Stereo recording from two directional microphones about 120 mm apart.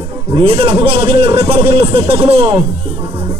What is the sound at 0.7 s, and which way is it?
Speech, 50° right (ahead or behind).